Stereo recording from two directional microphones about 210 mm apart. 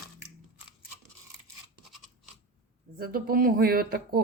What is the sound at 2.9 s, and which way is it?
Speech, 45° right (ahead or behind).